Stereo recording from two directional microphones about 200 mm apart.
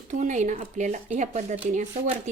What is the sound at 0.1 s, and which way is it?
Speech, 35° right (ahead or behind).